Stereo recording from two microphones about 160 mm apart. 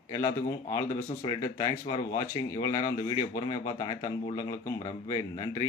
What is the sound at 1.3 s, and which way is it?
Speech, 20° left (ahead or behind).